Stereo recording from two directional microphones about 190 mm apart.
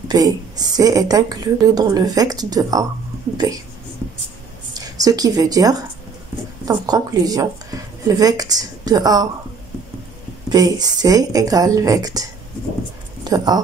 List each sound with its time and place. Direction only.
0.1 s a woman's voice: 20° right (ahead or behind)
4.7 s speech: 20° right (ahead or behind)
10.5 s a woman's voice: 20° right (ahead or behind)